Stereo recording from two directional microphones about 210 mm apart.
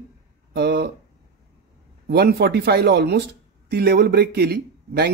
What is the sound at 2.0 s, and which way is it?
Speech, 50° right (ahead or behind).